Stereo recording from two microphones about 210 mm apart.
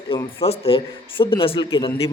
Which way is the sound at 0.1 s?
25° left (ahead or behind).